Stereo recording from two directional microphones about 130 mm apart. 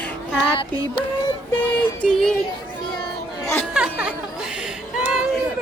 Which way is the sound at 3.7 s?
5° right (ahead or behind).